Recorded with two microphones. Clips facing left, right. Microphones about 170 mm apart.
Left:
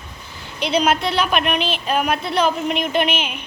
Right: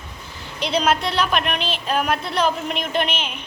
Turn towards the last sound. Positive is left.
turn(degrees=10)  # may be behind; listen again after turning